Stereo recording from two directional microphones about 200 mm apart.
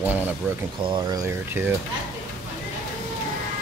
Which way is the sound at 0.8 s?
25° right (ahead or behind).